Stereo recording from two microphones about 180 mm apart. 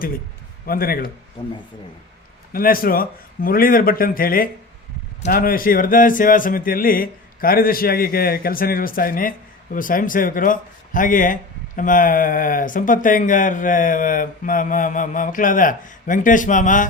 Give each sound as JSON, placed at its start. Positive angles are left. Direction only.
{"t": 0.6, "sound": "speech", "side_deg": 55}
{"t": 2.5, "sound": "speech", "side_deg": 55}